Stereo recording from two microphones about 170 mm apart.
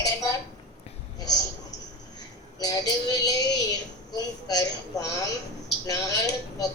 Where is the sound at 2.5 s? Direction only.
20° left (ahead or behind).